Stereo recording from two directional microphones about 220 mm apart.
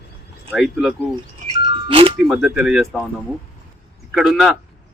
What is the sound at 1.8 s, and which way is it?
Music, 25° right (ahead or behind).